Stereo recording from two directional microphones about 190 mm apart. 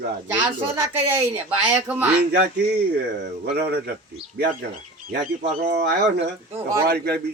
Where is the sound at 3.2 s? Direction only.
60° right (ahead or behind).